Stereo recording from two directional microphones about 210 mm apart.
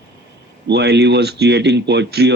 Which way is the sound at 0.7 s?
55° right (ahead or behind).